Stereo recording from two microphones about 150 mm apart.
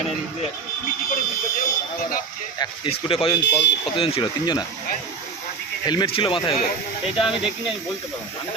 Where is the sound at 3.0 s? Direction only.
40° left (ahead or behind).